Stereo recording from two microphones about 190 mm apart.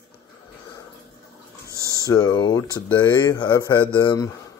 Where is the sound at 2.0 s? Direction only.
20° left (ahead or behind).